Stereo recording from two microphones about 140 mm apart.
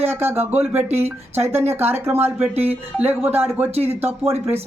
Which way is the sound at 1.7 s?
15° right (ahead or behind).